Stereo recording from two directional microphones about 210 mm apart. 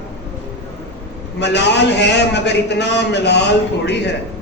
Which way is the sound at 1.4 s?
55° left (ahead or behind).